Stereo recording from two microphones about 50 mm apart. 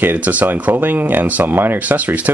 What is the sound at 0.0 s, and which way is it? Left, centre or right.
Speech, right.